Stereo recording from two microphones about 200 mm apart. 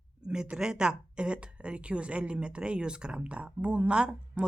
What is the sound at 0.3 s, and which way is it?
A woman's voice, 5° right (ahead or behind).